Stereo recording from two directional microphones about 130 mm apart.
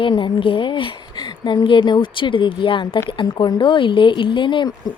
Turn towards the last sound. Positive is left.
turn(degrees=40)  # may be behind; listen again after turning